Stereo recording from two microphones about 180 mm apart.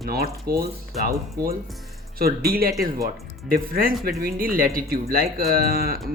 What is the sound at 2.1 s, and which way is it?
Speech, 55° right (ahead or behind).